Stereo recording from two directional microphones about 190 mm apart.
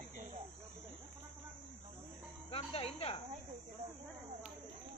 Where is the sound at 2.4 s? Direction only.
30° left (ahead or behind).